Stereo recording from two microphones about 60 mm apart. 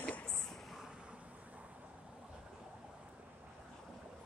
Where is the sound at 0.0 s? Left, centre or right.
Left.